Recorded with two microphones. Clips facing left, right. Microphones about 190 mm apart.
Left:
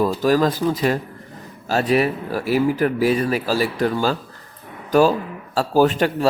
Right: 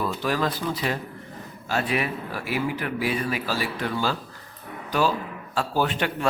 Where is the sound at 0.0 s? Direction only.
40° left (ahead or behind).